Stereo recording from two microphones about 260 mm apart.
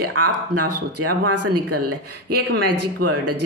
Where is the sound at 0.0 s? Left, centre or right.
Right.